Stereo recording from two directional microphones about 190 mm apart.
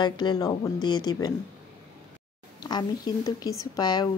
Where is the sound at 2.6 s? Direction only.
20° left (ahead or behind).